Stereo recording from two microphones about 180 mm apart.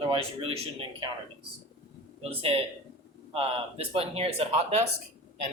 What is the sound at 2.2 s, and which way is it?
Speech, 30° right (ahead or behind).